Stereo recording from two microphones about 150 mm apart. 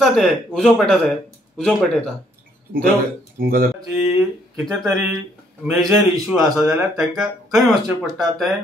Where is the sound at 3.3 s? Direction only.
75° right (ahead or behind).